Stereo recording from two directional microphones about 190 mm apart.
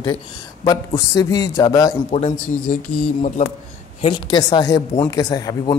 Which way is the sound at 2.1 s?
35° left (ahead or behind).